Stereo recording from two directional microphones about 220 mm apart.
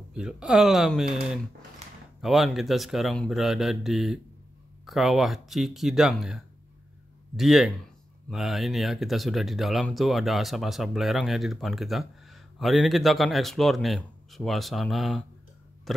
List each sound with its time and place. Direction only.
0.1 s speech: 5° right (ahead or behind)